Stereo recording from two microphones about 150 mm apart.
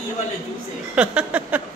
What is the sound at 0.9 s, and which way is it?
Speech, 5° right (ahead or behind).